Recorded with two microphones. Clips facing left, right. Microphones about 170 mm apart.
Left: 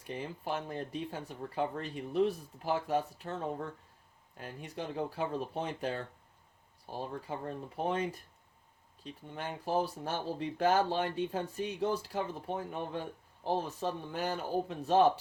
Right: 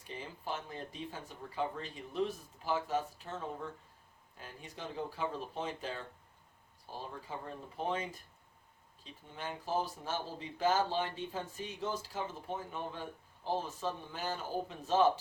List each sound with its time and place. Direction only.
0.1 s speech: 60° left (ahead or behind)
9.0 s speech: 60° left (ahead or behind)